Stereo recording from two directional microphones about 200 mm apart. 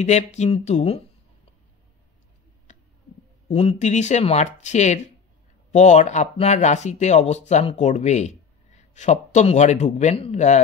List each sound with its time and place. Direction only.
0.0 s speech: 35° left (ahead or behind)
3.4 s speech: 35° left (ahead or behind)